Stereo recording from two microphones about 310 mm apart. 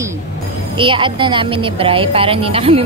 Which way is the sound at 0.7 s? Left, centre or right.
Centre.